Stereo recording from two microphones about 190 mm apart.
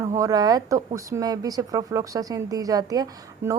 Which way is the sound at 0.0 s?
15° right (ahead or behind).